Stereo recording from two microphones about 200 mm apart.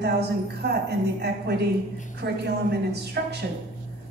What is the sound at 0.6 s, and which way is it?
A woman's voice, 55° right (ahead or behind).